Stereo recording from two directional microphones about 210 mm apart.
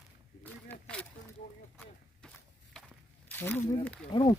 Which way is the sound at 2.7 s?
5° left (ahead or behind).